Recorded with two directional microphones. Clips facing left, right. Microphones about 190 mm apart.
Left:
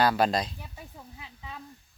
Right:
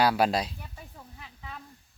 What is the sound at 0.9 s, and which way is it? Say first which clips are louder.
Sizzle: left 1 dB; 15° left (ahead or behind).